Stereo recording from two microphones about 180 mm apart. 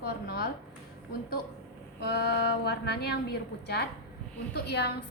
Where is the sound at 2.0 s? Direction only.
65° left (ahead or behind).